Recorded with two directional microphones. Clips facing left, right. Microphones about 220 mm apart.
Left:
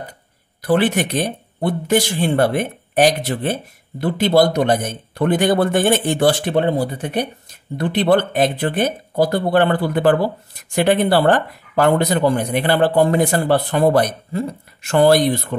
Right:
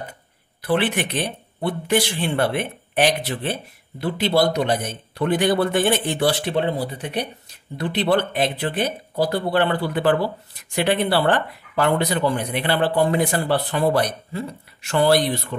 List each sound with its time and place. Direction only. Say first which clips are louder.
0.6 s speech: left 5 dB; 45° left (ahead or behind)